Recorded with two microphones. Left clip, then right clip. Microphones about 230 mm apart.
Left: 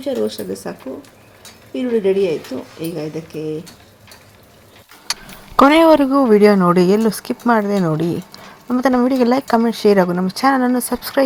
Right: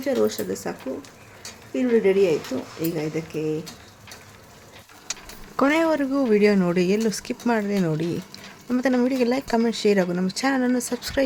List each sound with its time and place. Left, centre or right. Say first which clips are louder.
0.0 s speech: left 2 dB; centre
5.5 s speech: left 11 dB; centre
8.4 s a sound: left 6 dB; centre
8.9 s speech: left 6 dB; centre
9.1 s speech: left 7 dB; centre